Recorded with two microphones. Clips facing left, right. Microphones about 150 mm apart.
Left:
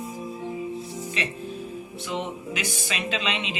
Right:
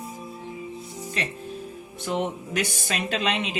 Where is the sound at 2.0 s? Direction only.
50° right (ahead or behind).